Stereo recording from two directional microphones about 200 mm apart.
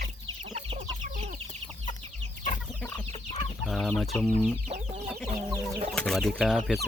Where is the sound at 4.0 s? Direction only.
5° left (ahead or behind).